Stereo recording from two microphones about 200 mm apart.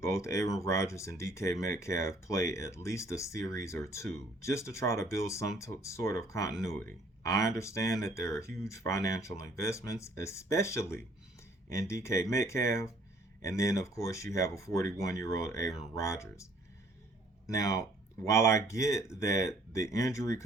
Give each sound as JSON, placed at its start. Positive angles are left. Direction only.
{"t": 0.0, "sound": "speech", "side_deg": 15}
{"t": 17.5, "sound": "speech", "side_deg": 15}